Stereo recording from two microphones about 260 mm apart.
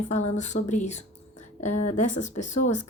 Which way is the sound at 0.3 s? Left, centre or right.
Left.